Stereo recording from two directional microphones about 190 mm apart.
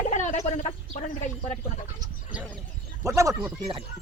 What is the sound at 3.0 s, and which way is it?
Speech, 15° right (ahead or behind).